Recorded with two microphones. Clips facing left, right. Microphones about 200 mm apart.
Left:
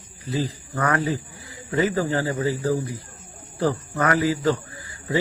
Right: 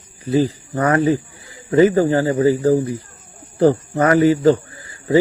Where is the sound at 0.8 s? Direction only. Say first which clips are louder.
Right 8 dB; 25° right (ahead or behind).